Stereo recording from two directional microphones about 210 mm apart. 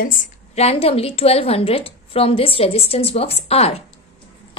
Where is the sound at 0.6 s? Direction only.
30° left (ahead or behind).